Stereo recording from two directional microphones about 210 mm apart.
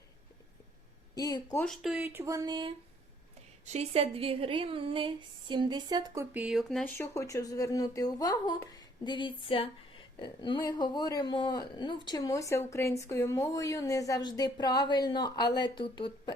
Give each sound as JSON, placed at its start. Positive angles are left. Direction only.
{"t": 1.1, "sound": "speech", "side_deg": 20}
{"t": 1.6, "sound": "speech", "side_deg": 0}
{"t": 6.3, "sound": "speech", "side_deg": 0}
{"t": 6.9, "sound": "speech", "side_deg": 15}